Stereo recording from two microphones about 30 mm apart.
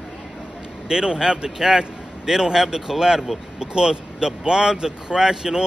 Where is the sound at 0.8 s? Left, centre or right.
Right.